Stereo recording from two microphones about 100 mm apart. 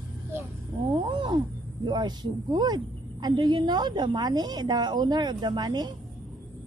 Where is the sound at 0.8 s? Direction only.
55° right (ahead or behind).